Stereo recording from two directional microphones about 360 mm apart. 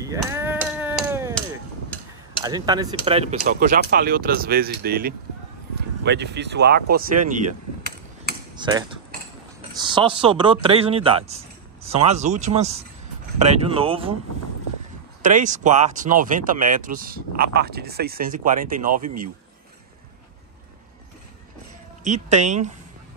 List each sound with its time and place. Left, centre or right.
0.0 s a sound: centre
1.9 s tick-tock: centre
2.4 s speech: centre
8.5 s speech: centre
15.2 s speech: right
22.0 s speech: centre